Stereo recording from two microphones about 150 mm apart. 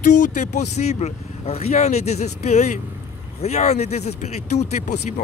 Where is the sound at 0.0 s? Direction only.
55° left (ahead or behind).